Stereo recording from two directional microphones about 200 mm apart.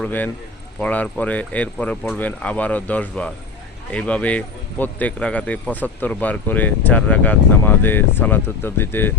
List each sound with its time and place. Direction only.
0.0 s speech: 10° left (ahead or behind)